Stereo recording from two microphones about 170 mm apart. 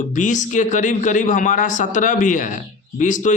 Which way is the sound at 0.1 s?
45° left (ahead or behind).